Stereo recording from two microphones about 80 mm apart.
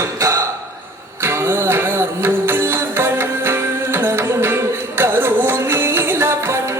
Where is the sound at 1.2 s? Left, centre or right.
Right.